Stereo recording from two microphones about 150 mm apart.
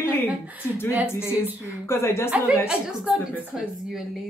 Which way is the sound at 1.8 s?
15° left (ahead or behind).